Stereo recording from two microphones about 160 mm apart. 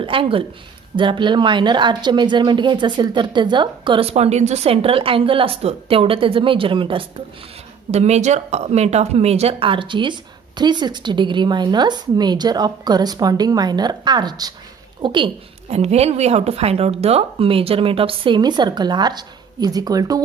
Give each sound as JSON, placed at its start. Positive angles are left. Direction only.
{"t": 0.0, "sound": "speech", "side_deg": -35}
{"t": 7.9, "sound": "a woman's voice", "side_deg": -45}